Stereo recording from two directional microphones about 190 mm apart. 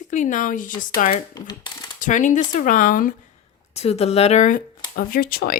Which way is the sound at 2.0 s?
40° left (ahead or behind).